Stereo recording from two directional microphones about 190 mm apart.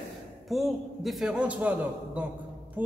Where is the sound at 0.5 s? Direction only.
Centre (ahead or behind).